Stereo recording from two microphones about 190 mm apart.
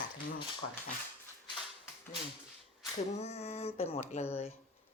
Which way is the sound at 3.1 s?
35° left (ahead or behind).